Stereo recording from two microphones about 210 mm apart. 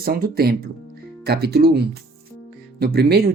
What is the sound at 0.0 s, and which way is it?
Speech, 45° right (ahead or behind).